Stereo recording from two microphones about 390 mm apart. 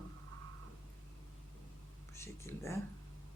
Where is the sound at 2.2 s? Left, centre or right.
Centre.